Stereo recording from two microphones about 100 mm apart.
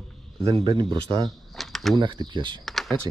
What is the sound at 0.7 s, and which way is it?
Speech, 50° right (ahead or behind).